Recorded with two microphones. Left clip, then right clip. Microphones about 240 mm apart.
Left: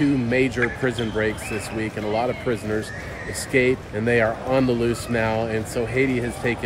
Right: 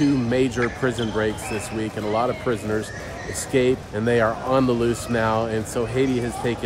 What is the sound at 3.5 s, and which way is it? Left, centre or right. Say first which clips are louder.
Speech: even; centre.